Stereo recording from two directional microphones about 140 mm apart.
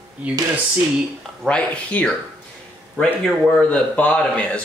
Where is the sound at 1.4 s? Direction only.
5° left (ahead or behind).